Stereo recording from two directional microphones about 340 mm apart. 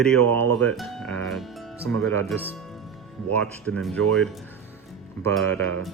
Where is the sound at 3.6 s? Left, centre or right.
Centre.